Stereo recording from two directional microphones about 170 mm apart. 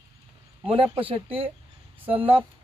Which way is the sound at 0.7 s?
35° right (ahead or behind).